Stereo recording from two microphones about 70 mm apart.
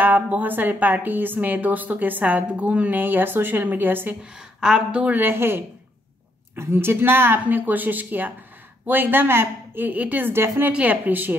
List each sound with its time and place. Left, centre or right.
0.0 s a woman's voice: right
4.2 s speech: centre
5.0 s a woman's voice: right
10.7 s a woman's voice: right